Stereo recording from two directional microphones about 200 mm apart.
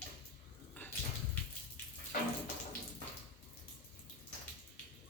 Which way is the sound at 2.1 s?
45° left (ahead or behind).